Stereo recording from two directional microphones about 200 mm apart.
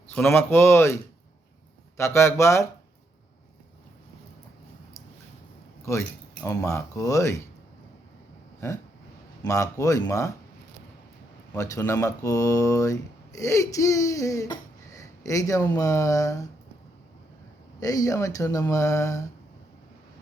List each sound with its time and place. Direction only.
0.1 s speech: 10° left (ahead or behind)
2.0 s speech: 15° left (ahead or behind)
5.8 s speech: 15° left (ahead or behind)
9.4 s speech: 15° left (ahead or behind)
11.5 s speech: 15° left (ahead or behind)
17.7 s speech: 15° left (ahead or behind)